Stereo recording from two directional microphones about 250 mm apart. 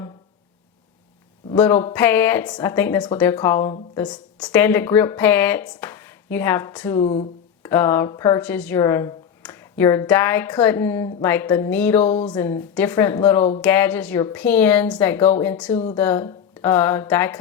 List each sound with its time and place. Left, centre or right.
1.5 s speech: centre
7.0 s a sound: left
7.7 s speech: centre